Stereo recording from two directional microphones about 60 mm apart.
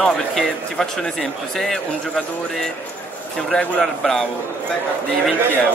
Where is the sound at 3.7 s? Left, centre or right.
Centre.